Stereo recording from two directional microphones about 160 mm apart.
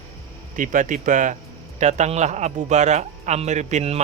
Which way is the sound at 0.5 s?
55° right (ahead or behind).